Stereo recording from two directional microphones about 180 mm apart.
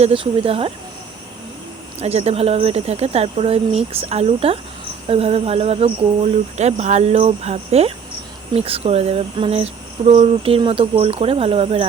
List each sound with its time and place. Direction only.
0.0 s speech: 30° right (ahead or behind)
2.0 s speech: 35° right (ahead or behind)